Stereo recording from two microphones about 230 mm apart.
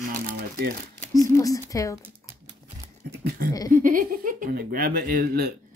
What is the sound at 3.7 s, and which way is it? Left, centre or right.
Speech, right.